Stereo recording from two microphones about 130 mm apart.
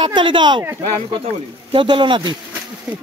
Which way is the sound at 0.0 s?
40° right (ahead or behind).